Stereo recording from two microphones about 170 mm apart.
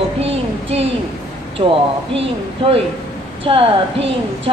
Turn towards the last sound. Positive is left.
turn(degrees=-35)  # may be behind; listen again after turning